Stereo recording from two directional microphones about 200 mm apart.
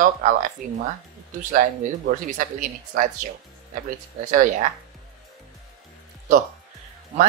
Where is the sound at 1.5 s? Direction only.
40° right (ahead or behind).